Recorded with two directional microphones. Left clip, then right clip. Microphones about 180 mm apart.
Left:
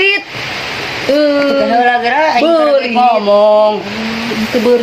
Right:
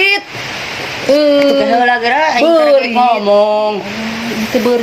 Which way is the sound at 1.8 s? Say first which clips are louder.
Even; 40° right (ahead or behind).